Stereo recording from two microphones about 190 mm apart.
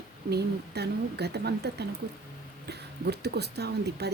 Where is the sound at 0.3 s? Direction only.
60° right (ahead or behind).